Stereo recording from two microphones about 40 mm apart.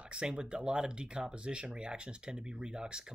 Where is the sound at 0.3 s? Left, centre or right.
Right.